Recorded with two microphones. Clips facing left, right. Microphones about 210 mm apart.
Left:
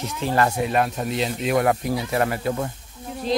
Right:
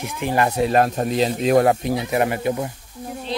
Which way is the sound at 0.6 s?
40° right (ahead or behind).